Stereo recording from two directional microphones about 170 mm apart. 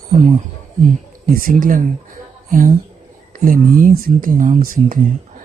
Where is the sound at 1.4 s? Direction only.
55° right (ahead or behind).